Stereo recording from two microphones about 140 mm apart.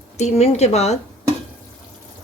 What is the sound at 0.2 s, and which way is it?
Speech, 50° left (ahead or behind).